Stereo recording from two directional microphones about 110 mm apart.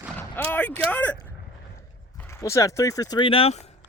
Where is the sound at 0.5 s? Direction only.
15° left (ahead or behind).